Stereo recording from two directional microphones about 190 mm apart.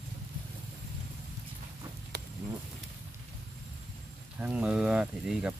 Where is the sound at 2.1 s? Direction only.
55° right (ahead or behind).